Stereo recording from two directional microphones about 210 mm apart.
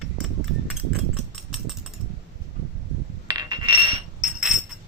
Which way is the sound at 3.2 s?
20° right (ahead or behind).